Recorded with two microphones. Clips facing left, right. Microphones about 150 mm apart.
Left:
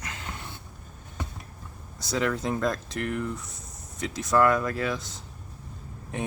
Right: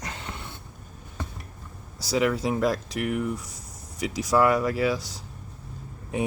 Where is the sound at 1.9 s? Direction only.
10° right (ahead or behind).